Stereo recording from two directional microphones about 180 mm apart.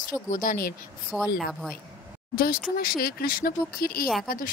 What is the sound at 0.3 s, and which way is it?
Speech, 50° left (ahead or behind).